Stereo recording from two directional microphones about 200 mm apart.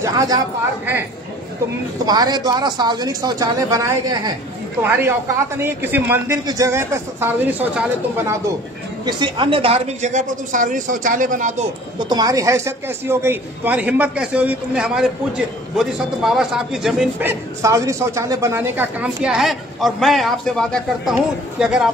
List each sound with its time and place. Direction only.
0.0 s speech: 20° right (ahead or behind)
2.0 s a man's voice: 20° right (ahead or behind)
9.0 s speech: 25° right (ahead or behind); by 11.6 s 40° right (ahead or behind)
12.0 s a man's voice: 20° right (ahead or behind); by 21.8 s 5° right (ahead or behind)